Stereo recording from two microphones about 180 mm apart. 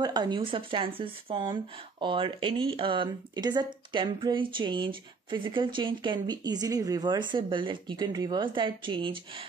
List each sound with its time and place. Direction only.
0.0 s speech: 25° right (ahead or behind)